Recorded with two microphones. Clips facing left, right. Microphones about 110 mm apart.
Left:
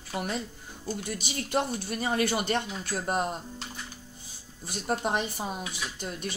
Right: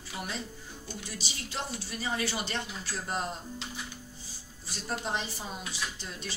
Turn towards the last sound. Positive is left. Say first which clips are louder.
# left 4 dB
turn(degrees=55)  # may be behind; listen again after turning